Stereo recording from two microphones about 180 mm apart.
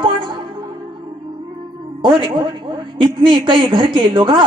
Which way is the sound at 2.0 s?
25° right (ahead or behind).